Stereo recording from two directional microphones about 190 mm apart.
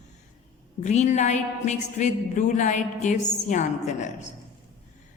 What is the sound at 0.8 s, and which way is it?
A woman's voice, 40° left (ahead or behind).